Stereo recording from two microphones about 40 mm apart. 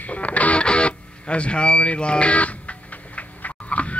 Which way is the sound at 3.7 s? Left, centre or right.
Left.